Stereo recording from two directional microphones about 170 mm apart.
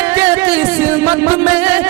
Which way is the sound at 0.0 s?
15° right (ahead or behind).